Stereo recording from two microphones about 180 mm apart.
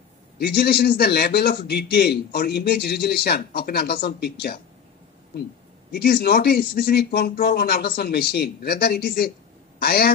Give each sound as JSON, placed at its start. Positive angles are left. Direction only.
{"t": 0.4, "sound": "a man's voice", "side_deg": 65}
{"t": 5.9, "sound": "a man's voice", "side_deg": 60}